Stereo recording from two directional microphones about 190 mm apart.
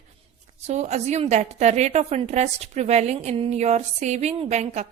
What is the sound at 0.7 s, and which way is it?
A woman's voice, 35° right (ahead or behind).